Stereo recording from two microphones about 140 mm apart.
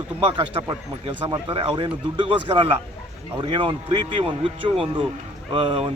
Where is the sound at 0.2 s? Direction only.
35° right (ahead or behind).